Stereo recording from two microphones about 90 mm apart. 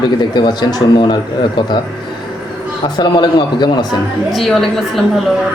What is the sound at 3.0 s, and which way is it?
Speech, 55° left (ahead or behind).